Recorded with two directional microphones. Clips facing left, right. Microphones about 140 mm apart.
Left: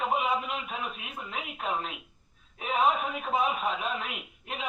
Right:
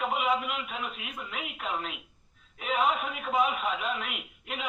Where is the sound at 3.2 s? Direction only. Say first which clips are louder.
Even; 30° left (ahead or behind).